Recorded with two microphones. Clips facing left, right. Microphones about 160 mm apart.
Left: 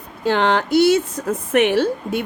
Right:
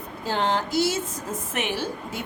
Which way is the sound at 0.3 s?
70° left (ahead or behind).